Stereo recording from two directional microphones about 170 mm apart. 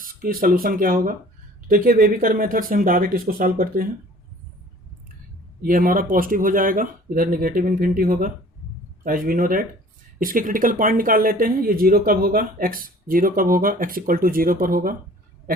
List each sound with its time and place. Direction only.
0.0 s speech: 55° right (ahead or behind)
5.6 s speech: 55° right (ahead or behind)